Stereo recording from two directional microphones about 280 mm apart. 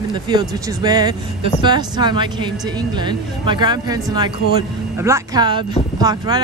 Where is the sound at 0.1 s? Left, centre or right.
Centre.